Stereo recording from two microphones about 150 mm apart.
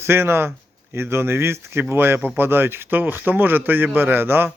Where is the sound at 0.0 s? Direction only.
15° right (ahead or behind).